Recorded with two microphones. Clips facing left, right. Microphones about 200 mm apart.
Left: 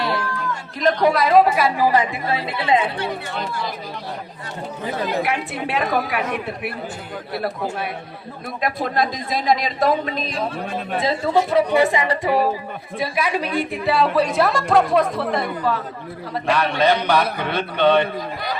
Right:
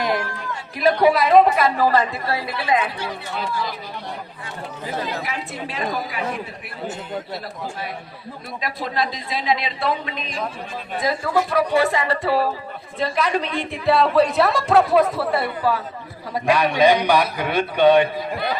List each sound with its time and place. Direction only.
0.8 s a woman's voice: 10° right (ahead or behind); by 2.9 s 25° left (ahead or behind)
5.2 s a woman's voice: 65° left (ahead or behind)
8.6 s a man's voice: 50° left (ahead or behind); by 18.1 s 10° right (ahead or behind)